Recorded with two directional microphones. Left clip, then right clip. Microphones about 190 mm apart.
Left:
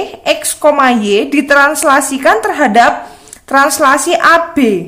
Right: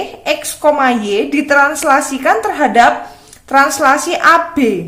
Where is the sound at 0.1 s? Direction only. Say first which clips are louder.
Left 3 dB; 20° left (ahead or behind).